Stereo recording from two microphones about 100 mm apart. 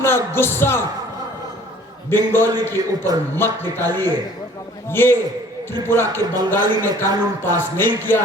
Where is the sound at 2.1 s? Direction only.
20° left (ahead or behind).